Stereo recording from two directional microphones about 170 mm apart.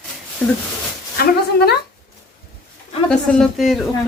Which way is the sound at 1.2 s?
65° left (ahead or behind).